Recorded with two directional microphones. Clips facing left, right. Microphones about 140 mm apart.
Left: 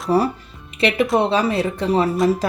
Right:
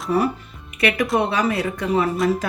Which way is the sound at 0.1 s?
35° left (ahead or behind).